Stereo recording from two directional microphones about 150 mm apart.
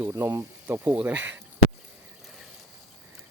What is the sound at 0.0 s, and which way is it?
Speech, 15° right (ahead or behind).